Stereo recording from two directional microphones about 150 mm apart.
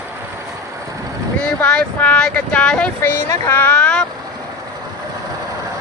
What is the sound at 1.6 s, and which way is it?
Speech, 10° left (ahead or behind).